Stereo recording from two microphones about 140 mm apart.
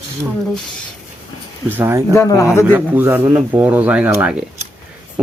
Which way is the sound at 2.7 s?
15° right (ahead or behind).